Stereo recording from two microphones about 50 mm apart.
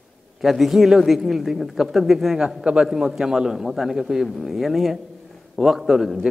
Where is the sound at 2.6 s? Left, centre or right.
Right.